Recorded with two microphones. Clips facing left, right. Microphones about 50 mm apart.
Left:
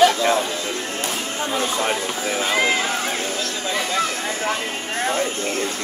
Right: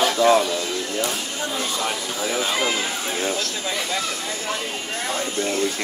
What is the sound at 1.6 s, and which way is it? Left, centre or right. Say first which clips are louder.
Speech: left 5 dB; left.